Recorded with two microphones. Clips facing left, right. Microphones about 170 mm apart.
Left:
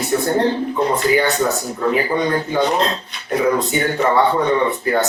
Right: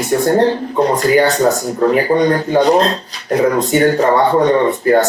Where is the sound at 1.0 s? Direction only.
40° right (ahead or behind).